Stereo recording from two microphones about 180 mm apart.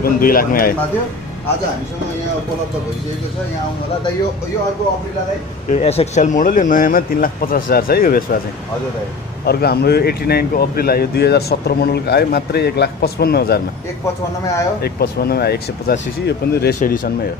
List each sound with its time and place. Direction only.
0.0 s speech: 55° left (ahead or behind)
5.7 s speech: 35° left (ahead or behind); by 8.2 s 55° left (ahead or behind)
9.5 s speech: 60° left (ahead or behind)
14.8 s speech: 60° left (ahead or behind)